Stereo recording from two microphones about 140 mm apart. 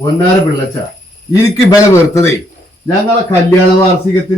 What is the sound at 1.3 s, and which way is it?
Speech, 20° left (ahead or behind).